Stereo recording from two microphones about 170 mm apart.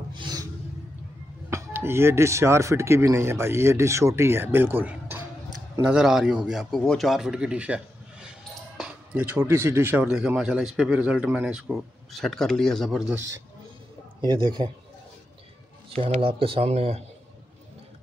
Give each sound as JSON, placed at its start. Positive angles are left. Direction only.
{"t": 0.1, "sound": "a sound", "side_deg": -25}
{"t": 1.5, "sound": "speech", "side_deg": -15}
{"t": 14.2, "sound": "speech", "side_deg": -25}
{"t": 15.9, "sound": "speech", "side_deg": -35}